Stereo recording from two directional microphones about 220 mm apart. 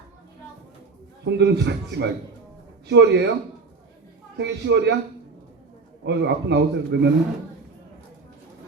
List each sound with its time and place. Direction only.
1.2 s a man's voice: 50° right (ahead or behind)
4.4 s a man's voice: 50° right (ahead or behind)
6.1 s a man's voice: 50° right (ahead or behind)